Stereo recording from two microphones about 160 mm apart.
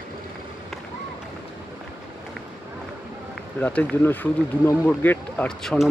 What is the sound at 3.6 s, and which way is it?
Speech, 10° left (ahead or behind).